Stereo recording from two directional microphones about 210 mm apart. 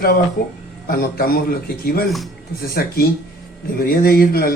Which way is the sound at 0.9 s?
45° left (ahead or behind).